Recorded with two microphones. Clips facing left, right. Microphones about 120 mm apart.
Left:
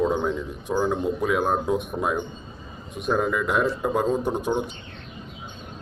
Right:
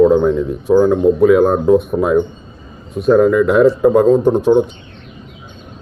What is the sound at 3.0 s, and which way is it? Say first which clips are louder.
Speech: right 13 dB; centre (ahead or behind).